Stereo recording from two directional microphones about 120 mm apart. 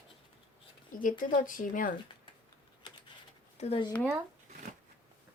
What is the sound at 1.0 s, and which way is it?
Speech, 90° left.